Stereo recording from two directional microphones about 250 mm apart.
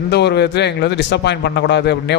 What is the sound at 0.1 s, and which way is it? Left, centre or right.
A man's voice, left.